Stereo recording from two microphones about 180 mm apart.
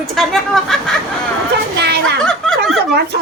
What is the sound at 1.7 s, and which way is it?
Speech, 65° right (ahead or behind).